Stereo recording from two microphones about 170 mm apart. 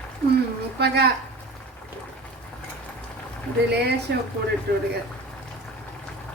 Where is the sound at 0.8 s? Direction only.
70° right (ahead or behind).